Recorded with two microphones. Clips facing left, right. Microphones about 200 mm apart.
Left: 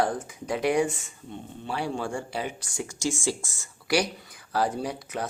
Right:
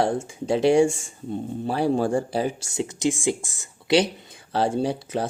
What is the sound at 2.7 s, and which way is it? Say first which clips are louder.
Speech: right 6 dB; 20° right (ahead or behind).